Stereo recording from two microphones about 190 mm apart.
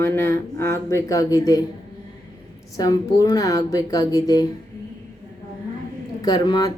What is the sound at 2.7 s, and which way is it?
Speech, 20° left (ahead or behind).